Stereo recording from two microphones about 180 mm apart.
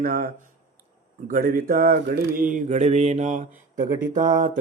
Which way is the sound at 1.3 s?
50° right (ahead or behind).